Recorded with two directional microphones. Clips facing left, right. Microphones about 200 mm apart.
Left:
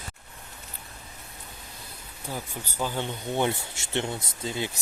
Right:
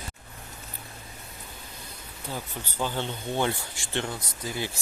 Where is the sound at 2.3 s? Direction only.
10° left (ahead or behind).